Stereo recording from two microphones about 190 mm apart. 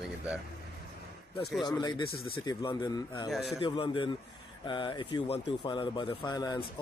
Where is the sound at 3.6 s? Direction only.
25° left (ahead or behind).